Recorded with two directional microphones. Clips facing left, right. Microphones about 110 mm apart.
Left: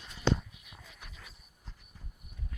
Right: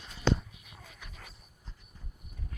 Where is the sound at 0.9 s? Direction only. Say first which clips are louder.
Right 2 dB; 55° right (ahead or behind).